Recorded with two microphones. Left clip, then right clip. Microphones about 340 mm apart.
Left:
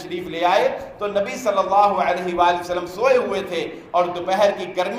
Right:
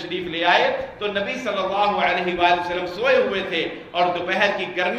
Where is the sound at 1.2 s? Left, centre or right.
Centre.